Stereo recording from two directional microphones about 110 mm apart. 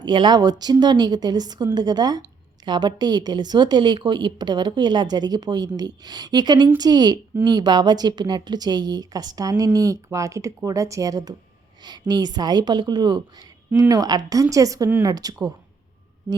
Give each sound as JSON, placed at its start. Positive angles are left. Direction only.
{"t": 0.0, "sound": "a woman's voice", "side_deg": -45}